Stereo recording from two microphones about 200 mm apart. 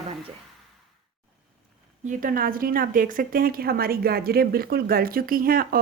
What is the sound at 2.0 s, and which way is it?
A woman's voice, 45° right (ahead or behind).